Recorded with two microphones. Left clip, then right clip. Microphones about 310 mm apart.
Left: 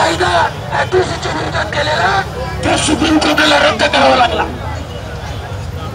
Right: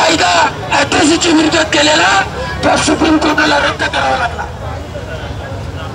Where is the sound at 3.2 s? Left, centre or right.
Centre.